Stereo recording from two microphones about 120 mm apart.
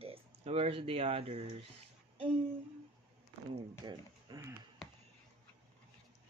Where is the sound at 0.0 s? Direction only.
55° right (ahead or behind).